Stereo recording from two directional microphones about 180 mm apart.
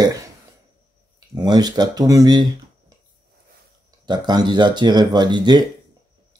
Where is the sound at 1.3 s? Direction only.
20° right (ahead or behind).